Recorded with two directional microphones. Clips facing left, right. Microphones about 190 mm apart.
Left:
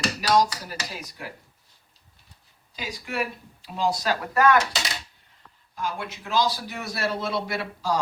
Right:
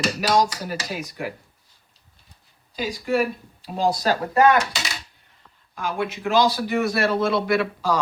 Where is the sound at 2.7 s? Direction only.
40° right (ahead or behind).